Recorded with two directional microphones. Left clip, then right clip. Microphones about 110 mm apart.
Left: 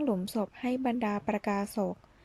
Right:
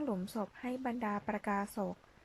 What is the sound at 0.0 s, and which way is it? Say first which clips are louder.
Speech: left 7 dB; 25° left (ahead or behind).